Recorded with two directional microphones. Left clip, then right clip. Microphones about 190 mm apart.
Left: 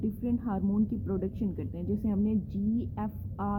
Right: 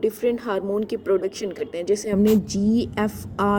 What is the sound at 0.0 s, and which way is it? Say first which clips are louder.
A woman's voice: right 12 dB; 5° right (ahead or behind).